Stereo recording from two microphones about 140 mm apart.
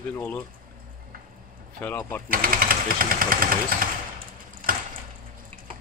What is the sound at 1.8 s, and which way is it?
Speech, 15° left (ahead or behind).